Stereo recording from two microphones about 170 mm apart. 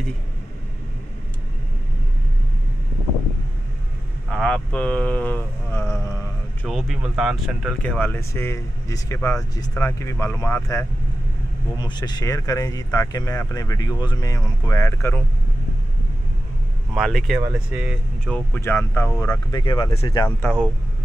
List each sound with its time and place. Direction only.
4.3 s a sound: 5° left (ahead or behind)
6.6 s speech: centre (ahead or behind)
16.9 s speech: centre (ahead or behind)
17.4 s speech: 10° right (ahead or behind)
18.2 s speech: 10° left (ahead or behind); by 20.2 s 30° left (ahead or behind)